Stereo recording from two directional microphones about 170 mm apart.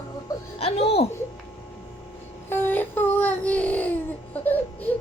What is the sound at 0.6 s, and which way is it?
Speech, 35° left (ahead or behind).